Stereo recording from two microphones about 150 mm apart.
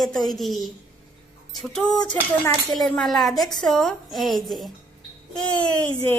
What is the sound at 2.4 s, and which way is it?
A woman's voice, 5° left (ahead or behind).